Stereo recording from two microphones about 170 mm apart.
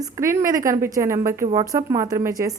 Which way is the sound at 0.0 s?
20° right (ahead or behind).